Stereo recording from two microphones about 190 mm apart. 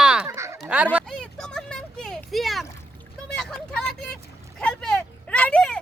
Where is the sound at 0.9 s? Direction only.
Centre (ahead or behind).